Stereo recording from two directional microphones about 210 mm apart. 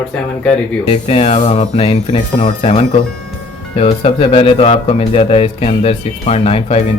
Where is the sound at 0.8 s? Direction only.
30° left (ahead or behind).